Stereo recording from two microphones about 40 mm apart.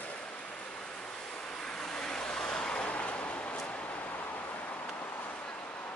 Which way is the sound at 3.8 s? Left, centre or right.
Left.